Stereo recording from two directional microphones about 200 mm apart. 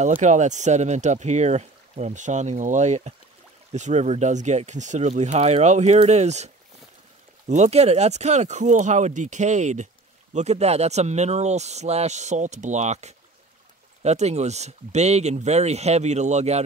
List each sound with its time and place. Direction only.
0.2 s speech: 35° right (ahead or behind)